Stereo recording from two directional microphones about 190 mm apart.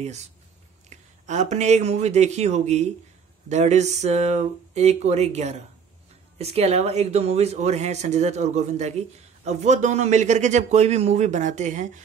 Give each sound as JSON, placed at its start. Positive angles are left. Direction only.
{"t": 0.8, "sound": "speech", "side_deg": -40}